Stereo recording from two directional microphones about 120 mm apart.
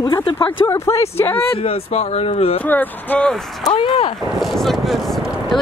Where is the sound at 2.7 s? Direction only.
15° left (ahead or behind).